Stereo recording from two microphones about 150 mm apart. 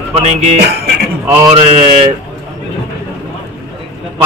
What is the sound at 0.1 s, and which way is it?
A man's voice, 50° right (ahead or behind).